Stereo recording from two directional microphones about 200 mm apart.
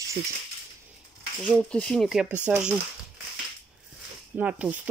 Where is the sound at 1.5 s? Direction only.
5° left (ahead or behind).